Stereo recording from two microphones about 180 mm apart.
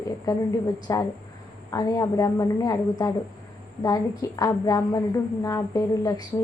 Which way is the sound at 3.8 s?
20° left (ahead or behind).